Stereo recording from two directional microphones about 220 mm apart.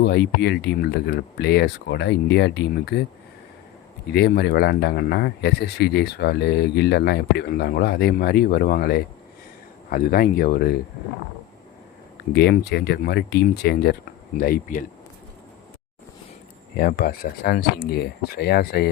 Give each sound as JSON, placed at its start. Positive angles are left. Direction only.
{"t": 0.0, "sound": "speech", "side_deg": 50}
{"t": 4.1, "sound": "speech", "side_deg": 50}
{"t": 12.3, "sound": "speech", "side_deg": 50}
{"t": 16.7, "sound": "speech", "side_deg": 40}